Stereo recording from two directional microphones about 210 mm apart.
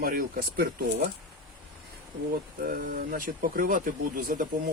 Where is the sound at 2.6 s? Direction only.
45° right (ahead or behind).